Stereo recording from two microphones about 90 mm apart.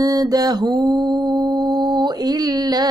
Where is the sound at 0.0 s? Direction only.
45° right (ahead or behind).